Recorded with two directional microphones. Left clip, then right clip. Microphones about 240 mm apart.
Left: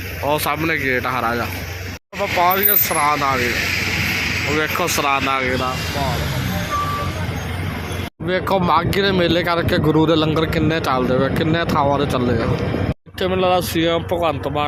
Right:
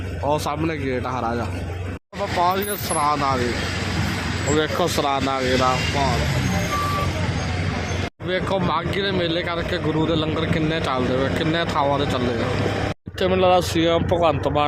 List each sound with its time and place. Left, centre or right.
0.3 s speech: centre
4.5 s speech: centre
8.3 s speech: centre
13.2 s speech: centre